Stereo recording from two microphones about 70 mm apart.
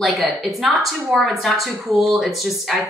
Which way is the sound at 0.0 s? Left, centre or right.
Centre.